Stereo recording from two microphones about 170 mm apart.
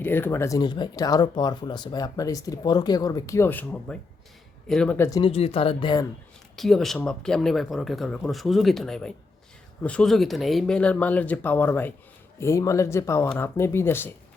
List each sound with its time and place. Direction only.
0.0 s speech: 10° left (ahead or behind)
5.1 s speech: 35° left (ahead or behind)
6.6 s speech: centre (ahead or behind)